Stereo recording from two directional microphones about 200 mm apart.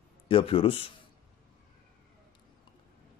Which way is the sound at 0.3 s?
25° left (ahead or behind).